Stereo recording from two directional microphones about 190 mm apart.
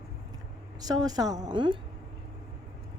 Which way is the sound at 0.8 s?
20° right (ahead or behind).